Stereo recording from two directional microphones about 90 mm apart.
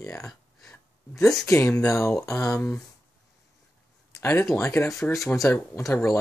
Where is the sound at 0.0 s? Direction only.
35° left (ahead or behind).